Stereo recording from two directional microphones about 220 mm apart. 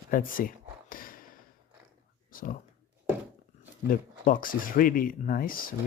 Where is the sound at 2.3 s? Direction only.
40° left (ahead or behind).